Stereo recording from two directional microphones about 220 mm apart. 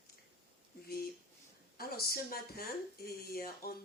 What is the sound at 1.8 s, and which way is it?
Speech, 45° left (ahead or behind).